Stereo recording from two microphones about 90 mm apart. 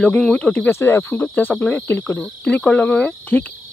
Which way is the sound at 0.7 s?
25° left (ahead or behind).